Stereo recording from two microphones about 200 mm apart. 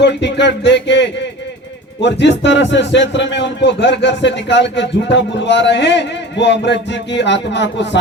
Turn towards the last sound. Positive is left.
turn(degrees=60)  # may be behind; listen again after turning